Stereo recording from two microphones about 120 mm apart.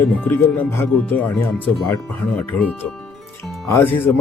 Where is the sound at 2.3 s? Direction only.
10° left (ahead or behind).